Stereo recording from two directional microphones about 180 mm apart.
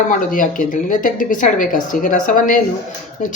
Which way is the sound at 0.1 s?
50° left (ahead or behind).